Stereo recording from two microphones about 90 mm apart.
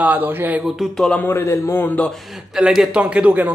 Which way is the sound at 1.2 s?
25° left (ahead or behind).